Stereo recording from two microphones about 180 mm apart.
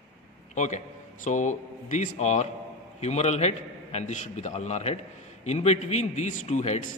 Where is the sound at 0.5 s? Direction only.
40° left (ahead or behind).